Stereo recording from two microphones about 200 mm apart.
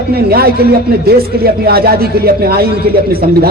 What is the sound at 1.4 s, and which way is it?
A man's voice, 50° right (ahead or behind).